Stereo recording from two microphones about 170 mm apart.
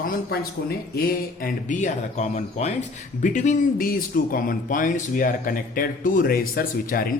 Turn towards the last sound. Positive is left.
turn(degrees=60)  # may be behind; listen again after turning